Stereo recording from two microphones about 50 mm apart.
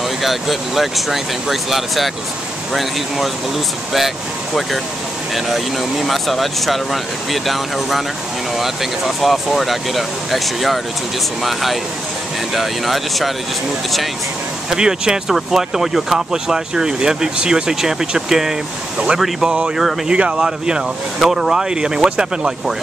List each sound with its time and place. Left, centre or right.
0.2 s speech: centre
5.3 s speech: centre
14.7 s speech: centre
20.1 s speech: centre